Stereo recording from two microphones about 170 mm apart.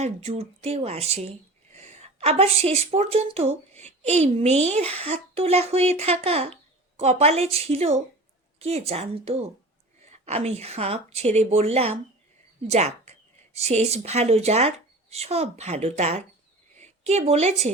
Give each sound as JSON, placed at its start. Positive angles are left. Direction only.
{"t": 0.0, "sound": "a woman's voice", "side_deg": -35}